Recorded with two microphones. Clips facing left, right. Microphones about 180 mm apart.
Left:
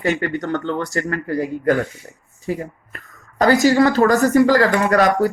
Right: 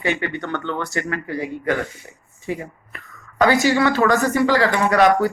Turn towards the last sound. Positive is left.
turn(degrees=45)  # may be behind; listen again after turning